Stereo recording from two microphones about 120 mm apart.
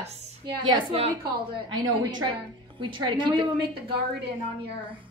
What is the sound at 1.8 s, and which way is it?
A woman's voice, 35° right (ahead or behind).